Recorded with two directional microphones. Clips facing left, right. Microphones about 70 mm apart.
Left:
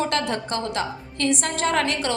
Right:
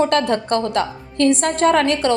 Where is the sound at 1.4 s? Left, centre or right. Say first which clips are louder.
Right 7 dB; right.